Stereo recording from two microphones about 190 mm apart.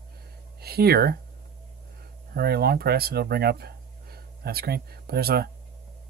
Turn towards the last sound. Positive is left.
turn(degrees=-55)  # may be behind; listen again after turning